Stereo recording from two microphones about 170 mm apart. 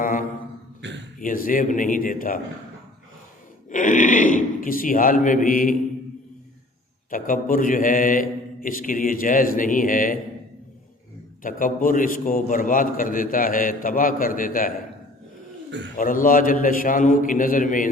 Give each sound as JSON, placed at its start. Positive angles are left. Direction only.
{"t": 0.0, "sound": "a sound", "side_deg": 55}
{"t": 0.8, "sound": "a sound", "side_deg": -90}
{"t": 1.2, "sound": "a man's voice", "side_deg": 55}
{"t": 3.7, "sound": "a man's voice", "side_deg": 50}
{"t": 7.1, "sound": "a man's voice", "side_deg": 55}
{"t": 11.4, "sound": "a man's voice", "side_deg": 55}
{"t": 16.0, "sound": "a man's voice", "side_deg": 55}